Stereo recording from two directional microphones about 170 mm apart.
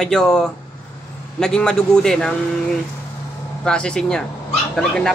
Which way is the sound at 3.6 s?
5° left (ahead or behind).